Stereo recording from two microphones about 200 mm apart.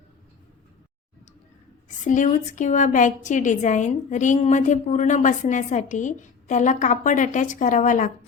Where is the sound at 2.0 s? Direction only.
40° left (ahead or behind).